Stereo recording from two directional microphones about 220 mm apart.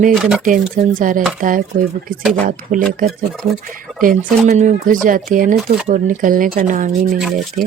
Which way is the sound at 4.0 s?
35° right (ahead or behind).